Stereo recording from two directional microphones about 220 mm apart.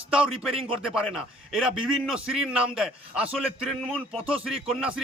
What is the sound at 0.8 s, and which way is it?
A man's voice, centre (ahead or behind).